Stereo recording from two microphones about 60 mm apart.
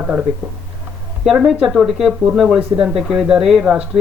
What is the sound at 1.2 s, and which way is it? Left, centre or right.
Speech, centre.